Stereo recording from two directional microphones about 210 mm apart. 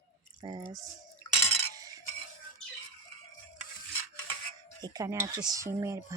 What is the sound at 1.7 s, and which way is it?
Stir, 15° right (ahead or behind).